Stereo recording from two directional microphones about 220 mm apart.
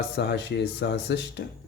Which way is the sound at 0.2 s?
50° left (ahead or behind).